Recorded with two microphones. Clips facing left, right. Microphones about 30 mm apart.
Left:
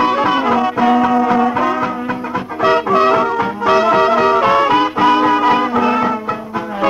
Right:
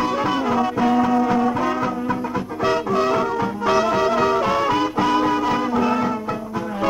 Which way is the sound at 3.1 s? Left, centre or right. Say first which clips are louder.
Left 6 dB; centre.